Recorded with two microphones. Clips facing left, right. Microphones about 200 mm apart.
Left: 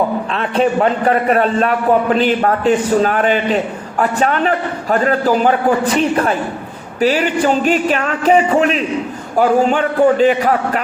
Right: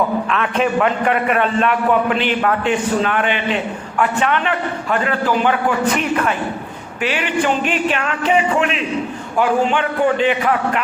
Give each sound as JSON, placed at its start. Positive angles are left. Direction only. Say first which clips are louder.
{"t": 0.3, "sound": "a man's voice", "louder": "left 3 dB", "side_deg": 35}